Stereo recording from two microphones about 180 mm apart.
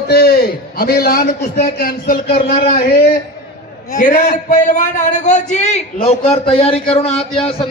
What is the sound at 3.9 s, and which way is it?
A man's voice, 45° left (ahead or behind).